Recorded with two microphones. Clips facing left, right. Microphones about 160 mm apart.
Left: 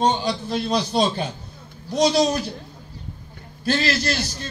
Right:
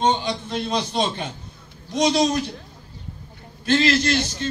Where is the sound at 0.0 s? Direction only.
35° left (ahead or behind).